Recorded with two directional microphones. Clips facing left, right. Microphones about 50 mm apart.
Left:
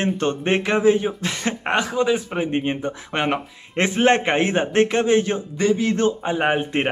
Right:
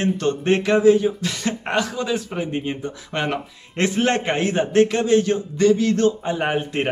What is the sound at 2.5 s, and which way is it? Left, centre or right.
Speech, left.